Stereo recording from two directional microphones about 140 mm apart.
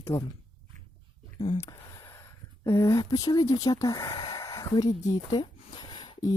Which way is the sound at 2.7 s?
25° left (ahead or behind).